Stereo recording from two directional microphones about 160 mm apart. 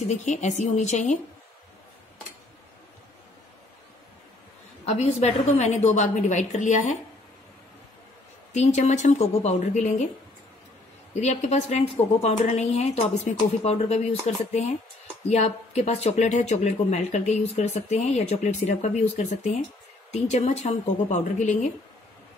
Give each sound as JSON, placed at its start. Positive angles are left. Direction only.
{"t": 0.0, "sound": "speech", "side_deg": 45}
{"t": 4.8, "sound": "speech", "side_deg": 45}
{"t": 8.5, "sound": "speech", "side_deg": 45}
{"t": 11.1, "sound": "speech", "side_deg": 45}